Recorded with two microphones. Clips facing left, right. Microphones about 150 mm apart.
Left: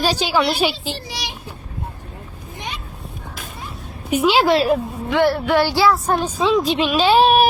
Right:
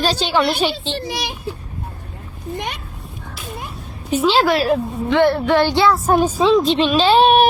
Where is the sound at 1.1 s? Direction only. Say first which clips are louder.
Right 5 dB; 55° right (ahead or behind).